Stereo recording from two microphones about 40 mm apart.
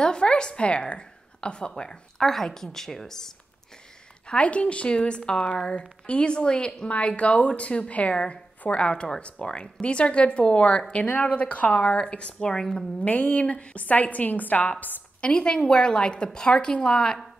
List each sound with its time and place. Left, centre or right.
0.0 s a woman's voice: left
4.3 s a woman's voice: left
11.8 s a woman's voice: centre
12.1 s a woman's voice: left
12.4 s a woman's voice: centre
13.0 s a woman's voice: left
15.1 s a woman's voice: left